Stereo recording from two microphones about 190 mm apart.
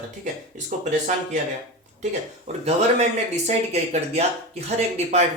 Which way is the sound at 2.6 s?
35° right (ahead or behind).